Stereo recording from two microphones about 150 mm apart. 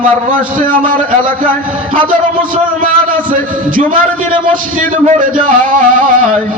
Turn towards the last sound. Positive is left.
turn(degrees=-60)  # may be behind; listen again after turning